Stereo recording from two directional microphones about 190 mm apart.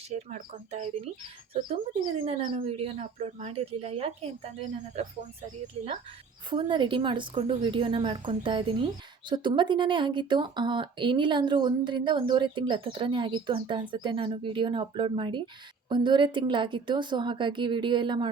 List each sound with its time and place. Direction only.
0.1 s speech: 40° right (ahead or behind)
1.5 s a woman's voice: 30° right (ahead or behind)